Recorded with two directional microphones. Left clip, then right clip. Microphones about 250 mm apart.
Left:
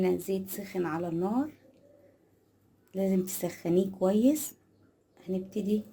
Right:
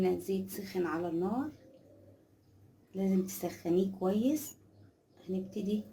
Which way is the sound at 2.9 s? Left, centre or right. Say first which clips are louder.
Left 4 dB; left.